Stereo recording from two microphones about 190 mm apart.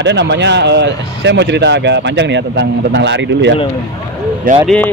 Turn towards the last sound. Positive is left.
turn(degrees=5)  # may be behind; listen again after turning